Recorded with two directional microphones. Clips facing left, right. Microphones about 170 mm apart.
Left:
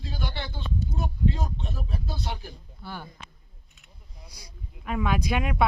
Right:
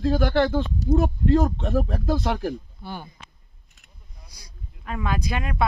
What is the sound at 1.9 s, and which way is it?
Speech, 90° right.